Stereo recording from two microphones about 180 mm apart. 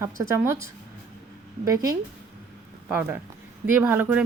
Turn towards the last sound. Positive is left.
turn(degrees=-10)  # may be behind; listen again after turning